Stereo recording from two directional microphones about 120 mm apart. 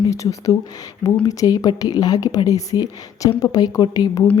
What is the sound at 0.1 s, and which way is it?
A woman's voice, 25° left (ahead or behind).